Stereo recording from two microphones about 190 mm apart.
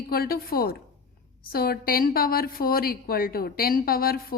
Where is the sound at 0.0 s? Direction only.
50° left (ahead or behind).